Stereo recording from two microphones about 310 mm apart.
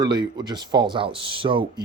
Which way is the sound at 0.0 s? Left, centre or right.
Centre.